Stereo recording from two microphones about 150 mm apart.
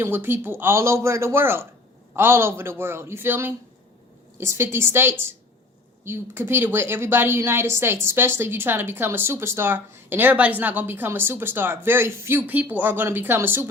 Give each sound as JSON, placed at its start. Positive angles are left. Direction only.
{"t": 0.0, "sound": "speech", "side_deg": -15}